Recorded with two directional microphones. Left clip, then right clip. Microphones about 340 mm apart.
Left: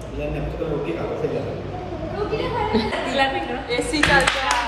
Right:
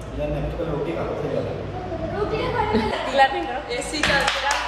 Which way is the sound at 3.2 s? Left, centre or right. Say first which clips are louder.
Right 4 dB; right.